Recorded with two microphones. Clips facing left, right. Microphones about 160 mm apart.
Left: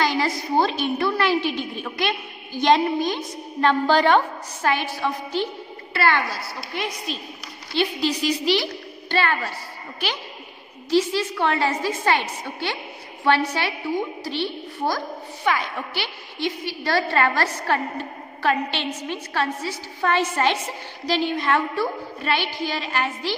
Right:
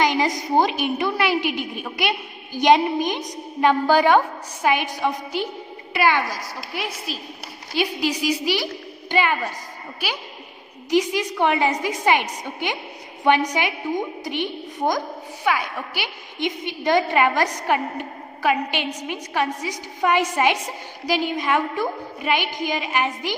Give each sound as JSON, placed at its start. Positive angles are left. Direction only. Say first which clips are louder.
{"t": 0.0, "sound": "a woman's voice", "louder": "right 2 dB", "side_deg": -15}